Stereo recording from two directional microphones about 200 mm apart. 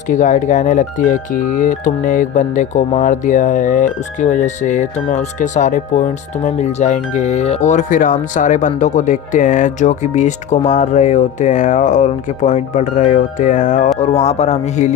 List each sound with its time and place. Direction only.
0.1 s speech: 40° left (ahead or behind)